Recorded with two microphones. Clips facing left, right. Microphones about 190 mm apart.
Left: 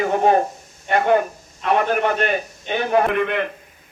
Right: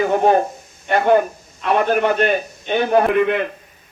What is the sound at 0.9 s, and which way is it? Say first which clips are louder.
A man's voice: right 2 dB; 40° right (ahead or behind).